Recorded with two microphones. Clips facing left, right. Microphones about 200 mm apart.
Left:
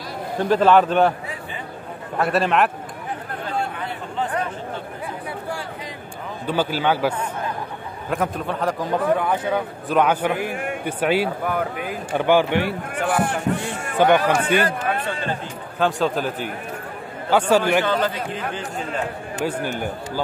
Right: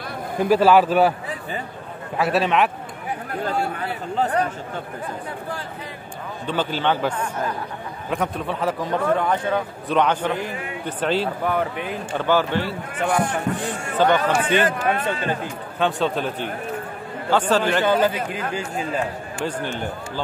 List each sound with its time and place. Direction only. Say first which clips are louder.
0.4 s a man's voice: even; 5° right (ahead or behind)
2.1 s a man's voice: even; centre (ahead or behind)
6.4 s a man's voice: left 1 dB; 10° left (ahead or behind)
12.2 s a man's voice: left 3 dB; 15° left (ahead or behind)
13.9 s a man's voice: left 2 dB; 15° left (ahead or behind)
14.6 s speech: right 2 dB; 20° right (ahead or behind)
15.8 s a man's voice: left 1 dB; centre (ahead or behind)
17.8 s speech: right 3 dB; 10° right (ahead or behind)
19.4 s a man's voice: left 2 dB; 10° left (ahead or behind)